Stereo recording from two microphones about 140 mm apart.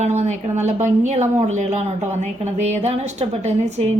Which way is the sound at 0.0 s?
55° right (ahead or behind).